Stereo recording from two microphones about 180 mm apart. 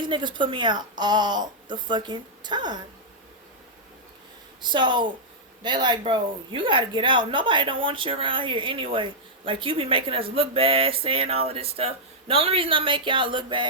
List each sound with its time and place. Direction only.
0.0 s a woman's voice: 25° right (ahead or behind)
4.6 s a woman's voice: 25° right (ahead or behind)